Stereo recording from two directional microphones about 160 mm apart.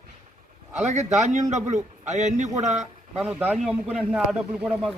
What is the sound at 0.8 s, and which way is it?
Speech, 45° right (ahead or behind).